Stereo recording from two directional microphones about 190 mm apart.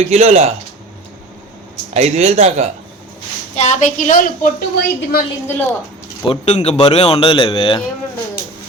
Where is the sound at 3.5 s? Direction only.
40° left (ahead or behind).